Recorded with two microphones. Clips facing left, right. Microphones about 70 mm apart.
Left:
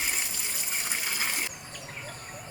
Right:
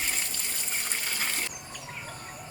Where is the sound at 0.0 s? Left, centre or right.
Centre.